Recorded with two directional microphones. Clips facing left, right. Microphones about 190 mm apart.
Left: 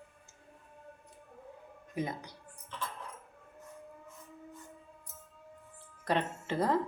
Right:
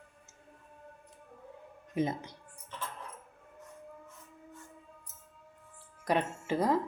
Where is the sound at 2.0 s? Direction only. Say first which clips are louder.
Right 5 dB; 25° right (ahead or behind).